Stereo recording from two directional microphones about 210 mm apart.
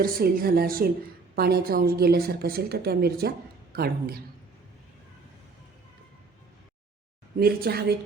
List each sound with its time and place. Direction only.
0.0 s a woman's voice: 45° right (ahead or behind)
7.3 s a woman's voice: 45° right (ahead or behind)